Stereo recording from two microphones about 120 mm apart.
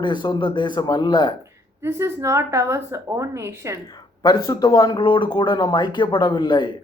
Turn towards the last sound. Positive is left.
turn(degrees=35)  # may be behind; listen again after turning